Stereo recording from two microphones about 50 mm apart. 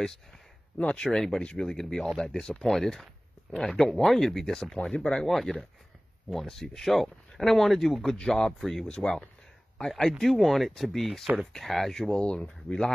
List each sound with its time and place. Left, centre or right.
0.7 s speech: left
1.1 s speech: centre
4.9 s speech: left
5.2 s speech: centre
8.2 s speech: centre
8.8 s speech: centre
12.1 s speech: left